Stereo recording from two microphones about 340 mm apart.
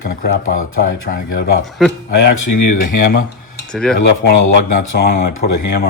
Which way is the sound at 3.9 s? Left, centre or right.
Left.